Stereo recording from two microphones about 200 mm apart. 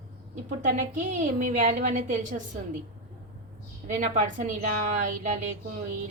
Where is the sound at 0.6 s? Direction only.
40° right (ahead or behind).